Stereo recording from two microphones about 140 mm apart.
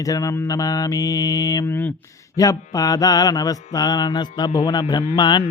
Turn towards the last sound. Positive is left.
turn(degrees=30)  # may be behind; listen again after turning